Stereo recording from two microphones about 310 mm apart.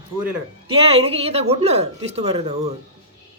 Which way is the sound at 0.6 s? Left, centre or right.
Centre.